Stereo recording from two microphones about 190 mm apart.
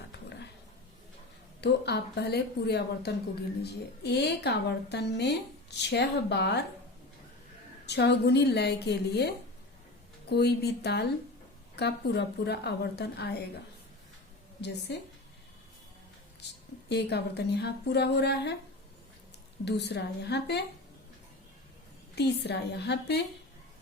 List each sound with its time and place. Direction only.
1.6 s a woman's voice: 60° left (ahead or behind)
7.9 s a woman's voice: 65° left (ahead or behind)
16.4 s a sound: 65° left (ahead or behind)
16.9 s a woman's voice: 60° left (ahead or behind)
19.6 s a woman's voice: 60° left (ahead or behind)
22.1 s a woman's voice: 60° left (ahead or behind)